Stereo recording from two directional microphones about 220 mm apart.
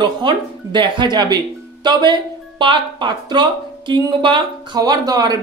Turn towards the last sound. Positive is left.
turn(degrees=-20)  # may be behind; listen again after turning